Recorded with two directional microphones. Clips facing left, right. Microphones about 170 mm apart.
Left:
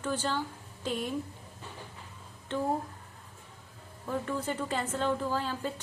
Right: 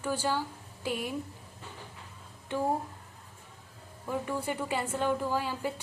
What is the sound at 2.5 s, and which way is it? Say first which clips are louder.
Speech: right 1 dB; 10° right (ahead or behind).